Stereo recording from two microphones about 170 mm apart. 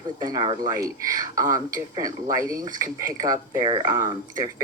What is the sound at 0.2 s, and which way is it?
Speech, 20° right (ahead or behind).